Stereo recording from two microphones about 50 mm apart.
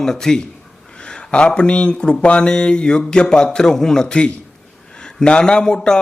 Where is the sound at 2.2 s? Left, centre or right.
Left.